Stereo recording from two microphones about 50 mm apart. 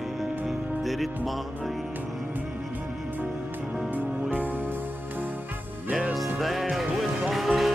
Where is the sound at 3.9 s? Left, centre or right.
Right.